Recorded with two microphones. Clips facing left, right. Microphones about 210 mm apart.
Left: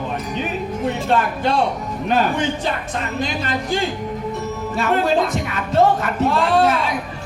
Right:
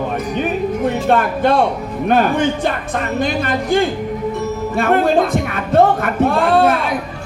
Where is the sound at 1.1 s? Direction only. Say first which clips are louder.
Right 5 dB; 55° right (ahead or behind).